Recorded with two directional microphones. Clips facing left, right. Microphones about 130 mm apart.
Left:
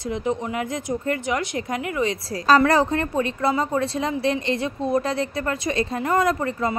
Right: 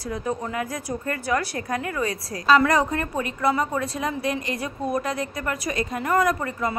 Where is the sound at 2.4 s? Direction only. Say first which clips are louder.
Left 2 dB; 35° left (ahead or behind).